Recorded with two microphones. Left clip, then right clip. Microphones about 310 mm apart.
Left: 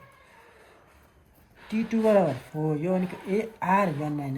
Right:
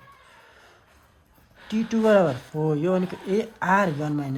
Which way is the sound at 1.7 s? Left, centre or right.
Right.